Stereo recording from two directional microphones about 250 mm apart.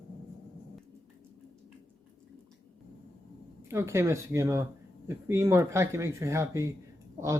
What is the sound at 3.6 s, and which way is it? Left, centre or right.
Speech, centre.